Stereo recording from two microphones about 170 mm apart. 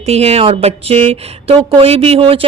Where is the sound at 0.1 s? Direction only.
35° right (ahead or behind).